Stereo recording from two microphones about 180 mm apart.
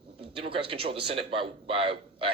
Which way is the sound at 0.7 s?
30° right (ahead or behind).